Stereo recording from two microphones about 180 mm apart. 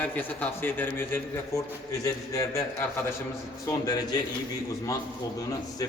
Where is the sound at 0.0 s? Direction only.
10° left (ahead or behind).